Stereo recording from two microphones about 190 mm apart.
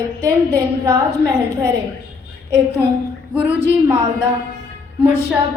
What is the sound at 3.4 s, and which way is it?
Speech, 10° right (ahead or behind).